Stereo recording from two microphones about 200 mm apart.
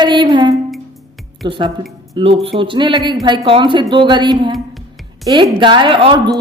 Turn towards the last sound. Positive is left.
turn(degrees=-25)  # may be behind; listen again after turning